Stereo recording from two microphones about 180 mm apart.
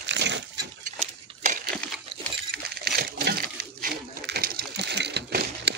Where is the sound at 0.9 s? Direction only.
40° right (ahead or behind).